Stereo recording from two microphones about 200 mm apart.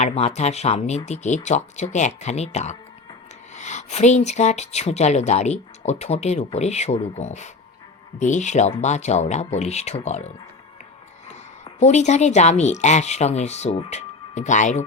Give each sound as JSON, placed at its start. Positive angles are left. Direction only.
{"t": 0.0, "sound": "a woman's voice", "side_deg": 30}